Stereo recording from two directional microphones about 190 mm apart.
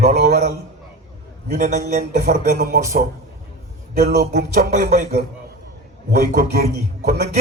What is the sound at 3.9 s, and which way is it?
Music, 55° right (ahead or behind).